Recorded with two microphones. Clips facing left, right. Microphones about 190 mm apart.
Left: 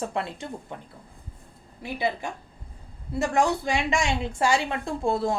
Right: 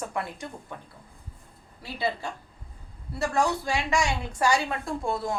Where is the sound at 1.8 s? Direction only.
20° left (ahead or behind).